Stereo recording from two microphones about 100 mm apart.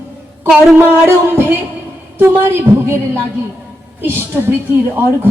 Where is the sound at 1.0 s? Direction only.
20° right (ahead or behind).